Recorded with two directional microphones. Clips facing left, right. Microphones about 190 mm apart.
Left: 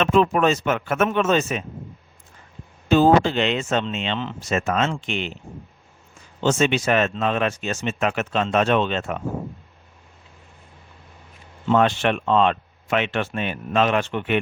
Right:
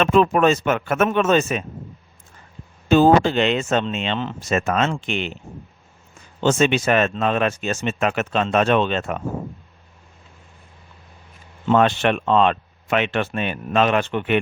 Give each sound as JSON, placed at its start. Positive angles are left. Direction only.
{"t": 0.0, "sound": "speech", "side_deg": -55}
{"t": 2.9, "sound": "speech", "side_deg": -50}
{"t": 6.4, "sound": "speech", "side_deg": -55}
{"t": 11.7, "sound": "speech", "side_deg": -60}